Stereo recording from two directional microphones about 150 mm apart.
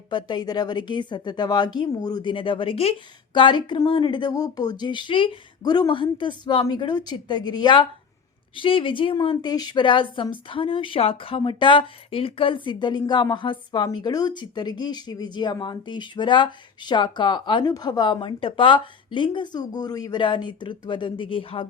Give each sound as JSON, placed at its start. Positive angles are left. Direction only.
{"t": 0.1, "sound": "speech", "side_deg": 30}